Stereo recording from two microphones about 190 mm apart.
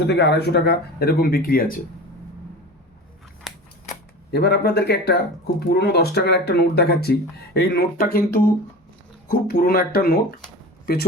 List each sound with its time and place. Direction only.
0.1 s speech: 60° left (ahead or behind)
3.5 s scissors: centre (ahead or behind)
4.3 s speech: 60° left (ahead or behind)
7.6 s speech: 75° left (ahead or behind)
7.9 s speech: 55° left (ahead or behind)
9.3 s speech: 60° left (ahead or behind)